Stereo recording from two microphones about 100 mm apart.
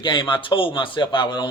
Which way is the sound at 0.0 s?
55° left (ahead or behind).